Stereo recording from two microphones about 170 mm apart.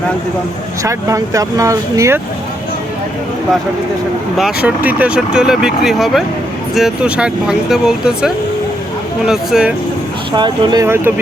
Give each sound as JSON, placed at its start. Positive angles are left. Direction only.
{"t": 0.9, "sound": "speech", "side_deg": -20}
{"t": 4.4, "sound": "speech", "side_deg": -5}
{"t": 10.3, "sound": "speech", "side_deg": -25}
{"t": 10.8, "sound": "speech", "side_deg": -15}